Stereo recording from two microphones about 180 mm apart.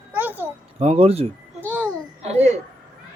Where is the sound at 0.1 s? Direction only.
10° right (ahead or behind).